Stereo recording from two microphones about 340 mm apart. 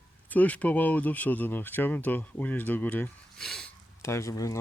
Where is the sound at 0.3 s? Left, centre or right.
Centre.